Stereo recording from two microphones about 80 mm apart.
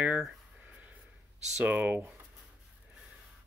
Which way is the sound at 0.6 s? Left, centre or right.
Centre.